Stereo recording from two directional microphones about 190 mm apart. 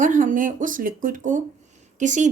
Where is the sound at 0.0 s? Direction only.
40° right (ahead or behind).